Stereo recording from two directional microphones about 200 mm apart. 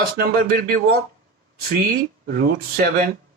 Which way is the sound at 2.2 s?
50° right (ahead or behind).